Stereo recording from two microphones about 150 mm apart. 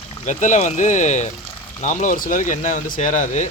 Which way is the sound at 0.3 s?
55° left (ahead or behind).